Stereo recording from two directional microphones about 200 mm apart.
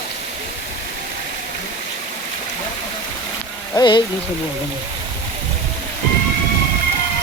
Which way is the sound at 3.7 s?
20° left (ahead or behind).